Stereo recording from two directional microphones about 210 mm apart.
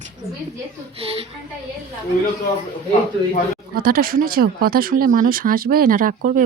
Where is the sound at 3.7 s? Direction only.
45° right (ahead or behind).